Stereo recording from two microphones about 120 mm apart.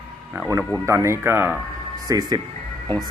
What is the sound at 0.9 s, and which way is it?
Speech, 25° right (ahead or behind).